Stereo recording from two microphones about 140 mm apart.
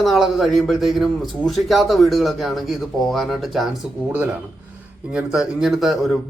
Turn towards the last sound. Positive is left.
turn(degrees=0)  # may be behind; listen again after turning